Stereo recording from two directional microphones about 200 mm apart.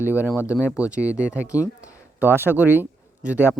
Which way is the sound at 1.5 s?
15° left (ahead or behind).